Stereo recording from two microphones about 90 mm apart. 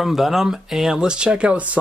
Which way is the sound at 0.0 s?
5° right (ahead or behind).